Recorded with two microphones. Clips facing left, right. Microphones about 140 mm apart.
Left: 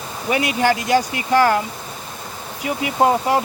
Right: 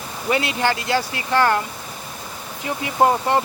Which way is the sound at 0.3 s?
15° left (ahead or behind).